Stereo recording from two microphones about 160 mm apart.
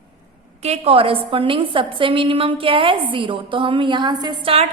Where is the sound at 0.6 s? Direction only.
40° right (ahead or behind).